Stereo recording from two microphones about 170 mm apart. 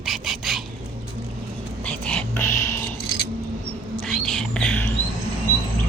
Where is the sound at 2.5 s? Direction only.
15° left (ahead or behind).